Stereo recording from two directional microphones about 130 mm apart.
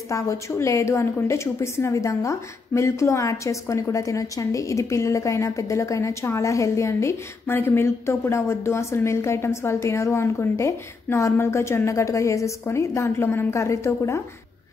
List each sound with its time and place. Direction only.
0.1 s a woman's voice: 25° left (ahead or behind)